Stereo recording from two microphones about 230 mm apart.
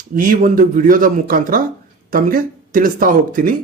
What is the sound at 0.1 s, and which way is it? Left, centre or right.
Speech, right.